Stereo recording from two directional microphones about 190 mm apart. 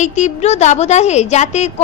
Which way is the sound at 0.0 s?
40° left (ahead or behind).